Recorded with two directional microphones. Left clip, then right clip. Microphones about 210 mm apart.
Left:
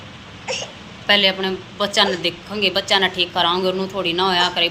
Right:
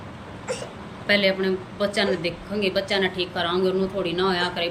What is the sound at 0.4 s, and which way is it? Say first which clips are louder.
Crying: left 5 dB; 25° right (ahead or behind).